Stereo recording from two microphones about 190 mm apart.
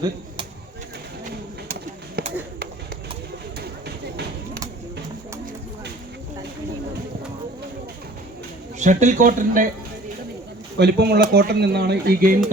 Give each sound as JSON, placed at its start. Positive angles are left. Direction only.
{"t": 2.2, "sound": "chop", "side_deg": -55}
{"t": 3.6, "sound": "a sound", "side_deg": -60}
{"t": 8.8, "sound": "speech", "side_deg": -40}
{"t": 10.8, "sound": "speech", "side_deg": -65}